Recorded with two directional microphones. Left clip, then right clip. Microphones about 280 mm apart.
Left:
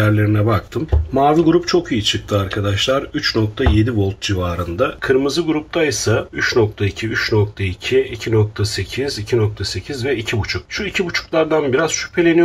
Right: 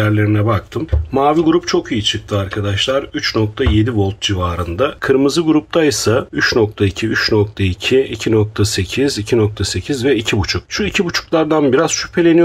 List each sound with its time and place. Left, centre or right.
0.0 s speech: centre
5.0 s speech: right